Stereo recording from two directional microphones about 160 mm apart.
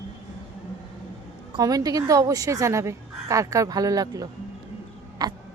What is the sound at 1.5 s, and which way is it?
A woman's voice, 25° right (ahead or behind).